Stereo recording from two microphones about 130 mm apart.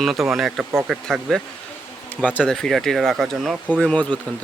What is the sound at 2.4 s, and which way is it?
Speech, 5° left (ahead or behind).